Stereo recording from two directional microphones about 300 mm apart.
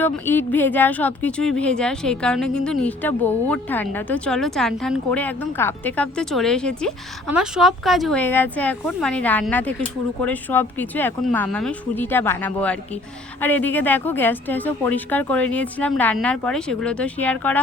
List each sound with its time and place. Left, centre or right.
0.0 s speech: centre